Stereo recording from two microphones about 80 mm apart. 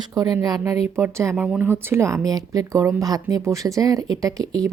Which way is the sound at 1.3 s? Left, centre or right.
Centre.